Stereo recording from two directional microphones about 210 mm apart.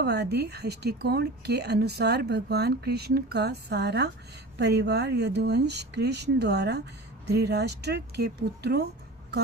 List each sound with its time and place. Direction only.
0.0 s a woman's voice: 50° right (ahead or behind)